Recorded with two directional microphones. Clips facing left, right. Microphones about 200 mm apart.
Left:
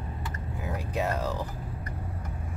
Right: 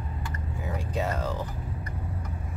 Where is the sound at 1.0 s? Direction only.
10° left (ahead or behind).